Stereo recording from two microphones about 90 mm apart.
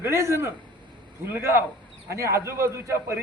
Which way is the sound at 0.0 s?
30° right (ahead or behind).